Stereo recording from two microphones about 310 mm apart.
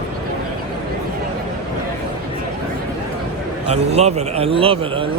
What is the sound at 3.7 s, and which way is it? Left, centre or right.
A man's voice, right.